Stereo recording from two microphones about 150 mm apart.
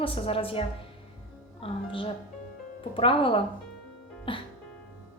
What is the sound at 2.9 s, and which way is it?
A woman's voice, 35° left (ahead or behind).